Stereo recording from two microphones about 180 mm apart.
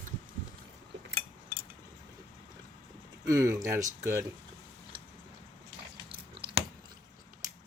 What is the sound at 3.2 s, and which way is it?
Speech, 15° right (ahead or behind).